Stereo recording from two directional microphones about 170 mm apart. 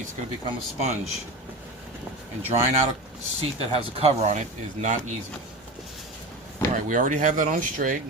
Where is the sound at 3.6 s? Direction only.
35° right (ahead or behind).